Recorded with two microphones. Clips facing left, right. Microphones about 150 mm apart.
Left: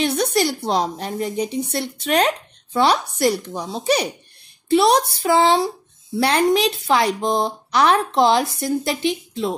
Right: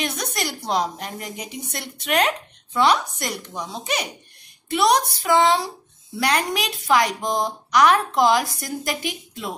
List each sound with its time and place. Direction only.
0.0 s speech: 30° left (ahead or behind)